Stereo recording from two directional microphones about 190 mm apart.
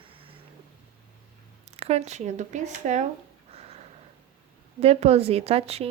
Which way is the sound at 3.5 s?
35° right (ahead or behind).